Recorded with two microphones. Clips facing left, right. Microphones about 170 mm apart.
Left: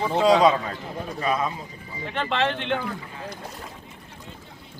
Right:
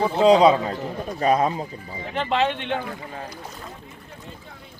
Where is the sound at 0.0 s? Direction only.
35° right (ahead or behind).